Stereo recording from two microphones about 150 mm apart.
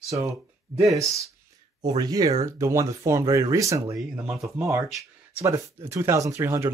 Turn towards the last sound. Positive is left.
turn(degrees=-20)  # may be behind; listen again after turning